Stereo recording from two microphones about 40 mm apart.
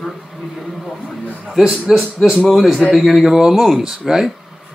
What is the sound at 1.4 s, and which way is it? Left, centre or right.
A man's voice, centre.